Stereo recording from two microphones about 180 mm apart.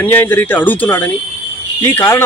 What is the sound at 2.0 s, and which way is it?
Speech, 15° left (ahead or behind).